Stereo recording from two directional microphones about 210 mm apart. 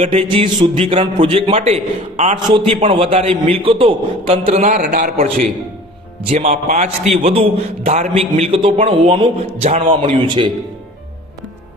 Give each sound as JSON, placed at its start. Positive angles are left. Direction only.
{"t": 0.0, "sound": "a man's voice", "side_deg": -30}
{"t": 4.7, "sound": "a man's voice", "side_deg": -45}
{"t": 6.2, "sound": "a man's voice", "side_deg": -35}